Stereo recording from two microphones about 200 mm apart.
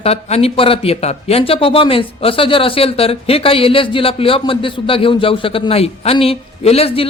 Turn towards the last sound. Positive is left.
turn(degrees=30)  # may be behind; listen again after turning